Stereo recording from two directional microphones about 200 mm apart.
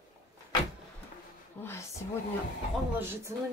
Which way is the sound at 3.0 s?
10° right (ahead or behind).